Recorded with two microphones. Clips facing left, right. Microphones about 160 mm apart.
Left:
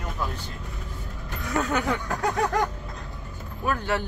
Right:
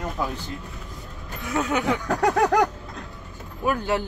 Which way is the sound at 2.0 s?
70° right (ahead or behind).